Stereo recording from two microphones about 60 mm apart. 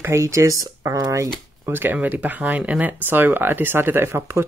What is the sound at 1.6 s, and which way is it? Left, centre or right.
Speech, right.